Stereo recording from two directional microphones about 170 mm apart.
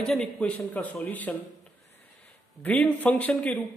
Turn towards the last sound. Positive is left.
turn(degrees=10)  # may be behind; listen again after turning